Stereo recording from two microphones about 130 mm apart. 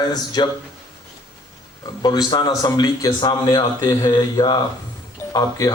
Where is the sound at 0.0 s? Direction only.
30° left (ahead or behind).